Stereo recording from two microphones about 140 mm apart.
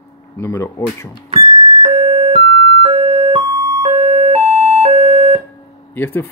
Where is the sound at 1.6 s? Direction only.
40° right (ahead or behind).